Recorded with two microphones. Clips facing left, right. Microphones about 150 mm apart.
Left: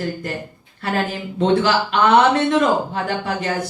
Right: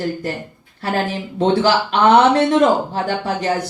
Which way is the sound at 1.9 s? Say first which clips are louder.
Right 2 dB; 35° right (ahead or behind).